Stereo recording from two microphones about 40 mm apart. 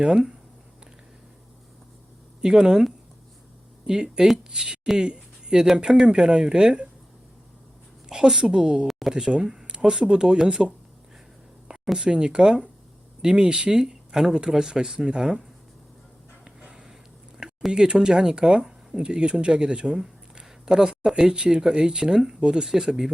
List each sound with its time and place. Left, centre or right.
0.0 s speech: centre
2.4 s speech: centre
3.8 s speech: centre
8.1 s speech: centre
8.9 s a sound: centre
9.1 s speech: centre
11.9 s speech: right
16.6 s a sound: right
17.7 s speech: centre
20.3 s a sound: centre
20.9 s speech: centre